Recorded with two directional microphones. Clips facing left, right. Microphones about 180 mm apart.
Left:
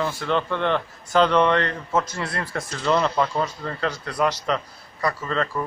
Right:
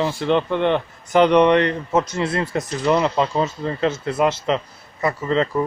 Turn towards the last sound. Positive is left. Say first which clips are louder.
# right 6 dB
turn(degrees=-20)  # may be behind; listen again after turning